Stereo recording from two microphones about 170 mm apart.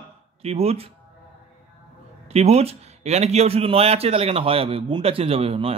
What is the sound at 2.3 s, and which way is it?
A man's voice, 40° right (ahead or behind).